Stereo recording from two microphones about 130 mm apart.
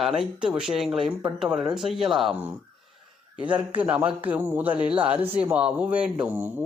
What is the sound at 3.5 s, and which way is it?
Speech, 10° right (ahead or behind).